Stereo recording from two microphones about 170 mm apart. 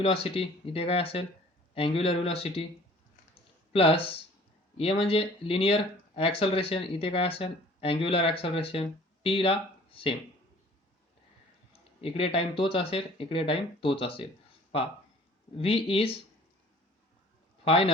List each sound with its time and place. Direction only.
0.0 s speech: 35° left (ahead or behind)
3.7 s speech: 35° left (ahead or behind)
11.9 s speech: 35° left (ahead or behind)
15.5 s speech: 35° left (ahead or behind)
17.7 s speech: 35° left (ahead or behind)